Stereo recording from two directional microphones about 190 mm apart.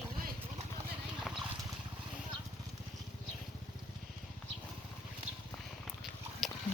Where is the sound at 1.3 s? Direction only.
Centre (ahead or behind).